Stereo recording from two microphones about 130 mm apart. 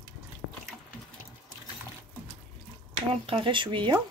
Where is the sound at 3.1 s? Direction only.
45° right (ahead or behind).